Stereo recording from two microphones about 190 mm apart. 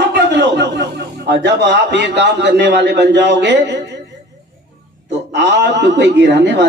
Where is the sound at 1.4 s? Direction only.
65° right (ahead or behind).